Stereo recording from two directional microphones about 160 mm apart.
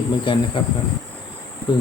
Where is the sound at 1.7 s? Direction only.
30° left (ahead or behind).